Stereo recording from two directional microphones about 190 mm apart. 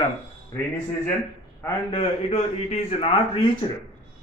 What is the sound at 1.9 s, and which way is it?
A man's voice, 30° left (ahead or behind).